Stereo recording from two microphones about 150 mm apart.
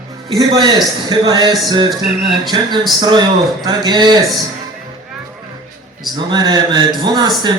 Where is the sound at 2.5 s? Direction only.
35° right (ahead or behind).